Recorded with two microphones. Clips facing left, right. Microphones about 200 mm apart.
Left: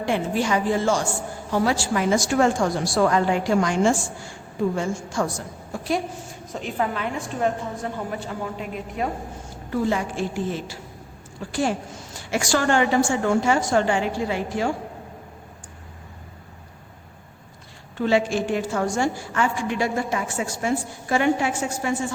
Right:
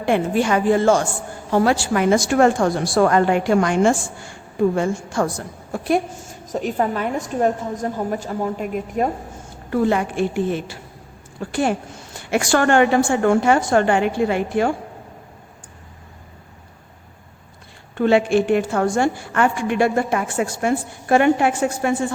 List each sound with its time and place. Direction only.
0.0 s a woman's voice: 55° right (ahead or behind)
6.5 s a woman's voice: 45° right (ahead or behind)
9.6 s a woman's voice: 60° right (ahead or behind)
17.9 s a woman's voice: 55° right (ahead or behind)